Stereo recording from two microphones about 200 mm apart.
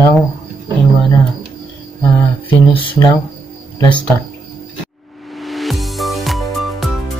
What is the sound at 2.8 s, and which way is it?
Speech, 20° left (ahead or behind).